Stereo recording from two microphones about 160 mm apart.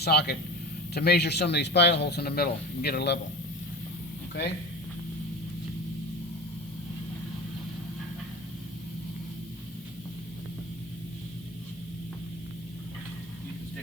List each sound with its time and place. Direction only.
0.0 s speech: 85° left